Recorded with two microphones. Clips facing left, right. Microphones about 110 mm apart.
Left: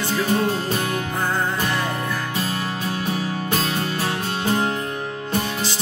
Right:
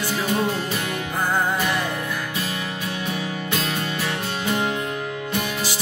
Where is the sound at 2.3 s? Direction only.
35° left (ahead or behind).